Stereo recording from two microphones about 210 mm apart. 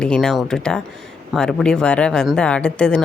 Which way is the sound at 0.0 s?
5° left (ahead or behind).